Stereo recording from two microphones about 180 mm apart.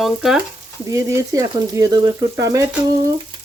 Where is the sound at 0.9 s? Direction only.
20° right (ahead or behind).